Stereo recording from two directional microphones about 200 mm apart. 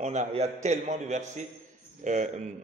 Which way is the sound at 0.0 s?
35° right (ahead or behind).